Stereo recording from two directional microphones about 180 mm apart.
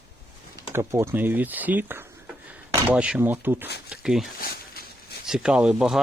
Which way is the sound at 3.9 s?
5° right (ahead or behind).